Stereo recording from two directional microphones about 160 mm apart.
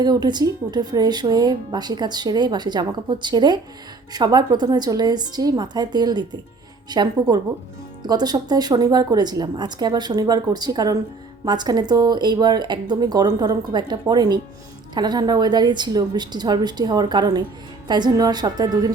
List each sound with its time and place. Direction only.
0.0 s speech: 25° right (ahead or behind)